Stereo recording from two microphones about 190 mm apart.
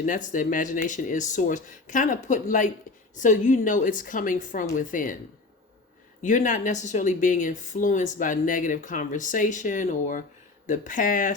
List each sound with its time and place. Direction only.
0.0 s a woman's voice: 45° left (ahead or behind)
6.2 s a woman's voice: 40° left (ahead or behind)